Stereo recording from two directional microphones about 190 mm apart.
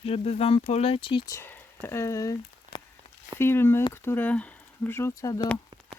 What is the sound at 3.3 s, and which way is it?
Speech, 10° left (ahead or behind).